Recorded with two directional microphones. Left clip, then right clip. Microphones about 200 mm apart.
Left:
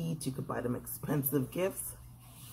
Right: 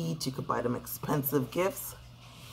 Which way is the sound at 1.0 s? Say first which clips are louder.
Right 4 dB; 5° right (ahead or behind).